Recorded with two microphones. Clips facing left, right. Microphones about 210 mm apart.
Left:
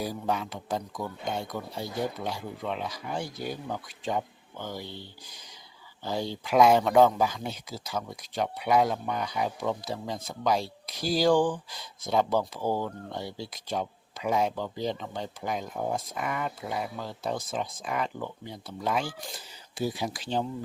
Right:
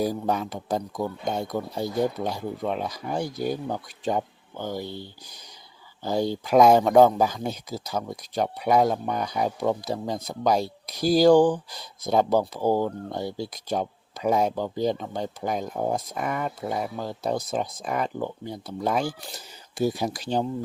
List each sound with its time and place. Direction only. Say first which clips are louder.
0.0 s speech: right 5 dB; 45° right (ahead or behind)